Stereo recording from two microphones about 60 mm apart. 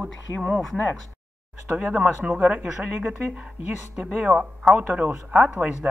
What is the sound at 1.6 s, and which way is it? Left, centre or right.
Speech, right.